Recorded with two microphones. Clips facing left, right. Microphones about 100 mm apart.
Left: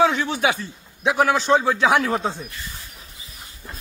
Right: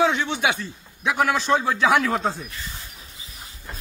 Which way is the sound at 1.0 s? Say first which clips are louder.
Left 3 dB; 30° left (ahead or behind).